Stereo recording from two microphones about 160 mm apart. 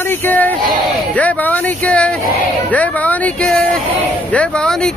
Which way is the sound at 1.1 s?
10° left (ahead or behind).